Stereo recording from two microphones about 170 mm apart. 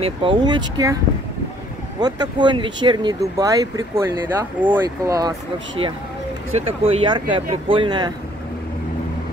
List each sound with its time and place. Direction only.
0.0 s speech: 30° right (ahead or behind)
2.0 s speech: 25° right (ahead or behind)
6.5 s speech: 35° right (ahead or behind)